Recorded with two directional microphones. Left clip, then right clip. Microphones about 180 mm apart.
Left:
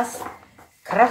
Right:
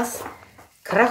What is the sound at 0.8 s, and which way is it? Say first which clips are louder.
Speech: left 1 dB; 55° right (ahead or behind).